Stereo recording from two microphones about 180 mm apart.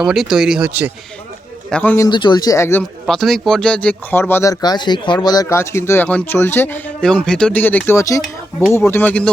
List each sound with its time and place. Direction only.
0.0 s speech: 5° right (ahead or behind)
1.7 s speech: 10° left (ahead or behind)
2.0 s speech: 25° left (ahead or behind)
3.1 s speech: centre (ahead or behind)